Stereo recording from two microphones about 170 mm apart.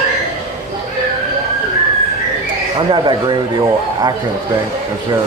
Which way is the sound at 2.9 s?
25° right (ahead or behind).